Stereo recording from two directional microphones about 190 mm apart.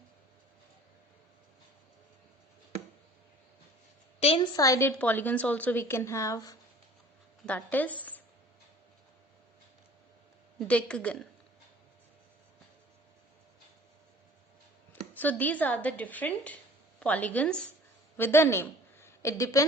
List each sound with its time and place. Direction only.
4.2 s a woman's voice: 30° left (ahead or behind)
4.5 s a woman's voice: 15° left (ahead or behind)
10.7 s a woman's voice: 5° left (ahead or behind)
15.1 s a woman's voice: 10° left (ahead or behind)